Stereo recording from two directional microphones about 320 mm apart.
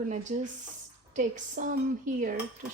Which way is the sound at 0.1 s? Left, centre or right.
Right.